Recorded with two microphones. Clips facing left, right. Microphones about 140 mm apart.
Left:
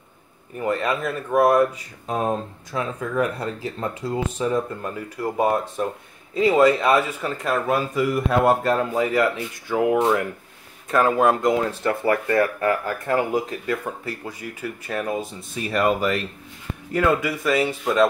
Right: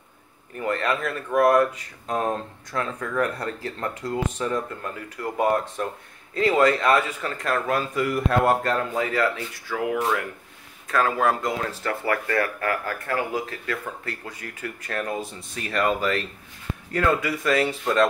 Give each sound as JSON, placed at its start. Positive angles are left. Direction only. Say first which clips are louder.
{"t": 0.6, "sound": "speech", "louder": "left 2 dB", "side_deg": 15}